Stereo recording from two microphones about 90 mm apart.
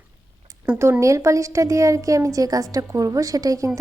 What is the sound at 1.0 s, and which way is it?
A woman's voice, 35° right (ahead or behind).